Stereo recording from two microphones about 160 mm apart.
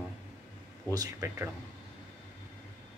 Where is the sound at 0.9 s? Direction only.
20° right (ahead or behind).